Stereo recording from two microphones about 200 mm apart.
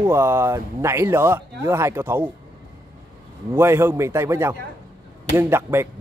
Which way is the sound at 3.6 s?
15° right (ahead or behind).